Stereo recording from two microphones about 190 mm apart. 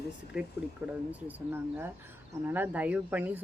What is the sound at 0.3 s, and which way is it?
Speech, 5° right (ahead or behind).